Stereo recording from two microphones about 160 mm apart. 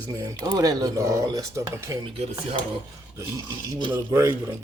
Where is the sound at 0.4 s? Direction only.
25° right (ahead or behind).